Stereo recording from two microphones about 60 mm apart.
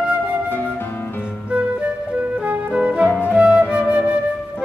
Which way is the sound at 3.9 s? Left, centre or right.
Centre.